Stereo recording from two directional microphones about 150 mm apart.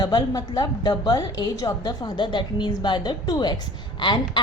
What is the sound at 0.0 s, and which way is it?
A woman's voice, 30° left (ahead or behind).